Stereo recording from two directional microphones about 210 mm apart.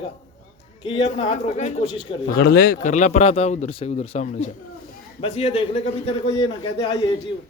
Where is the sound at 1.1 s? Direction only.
35° left (ahead or behind).